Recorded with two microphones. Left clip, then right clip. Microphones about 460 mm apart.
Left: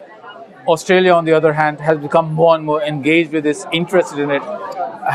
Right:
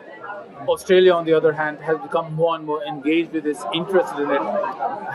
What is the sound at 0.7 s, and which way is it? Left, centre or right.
A man's voice, left.